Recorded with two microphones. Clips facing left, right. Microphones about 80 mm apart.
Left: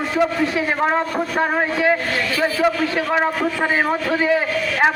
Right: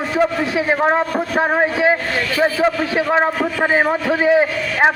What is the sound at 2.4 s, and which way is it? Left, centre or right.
A man's voice, right.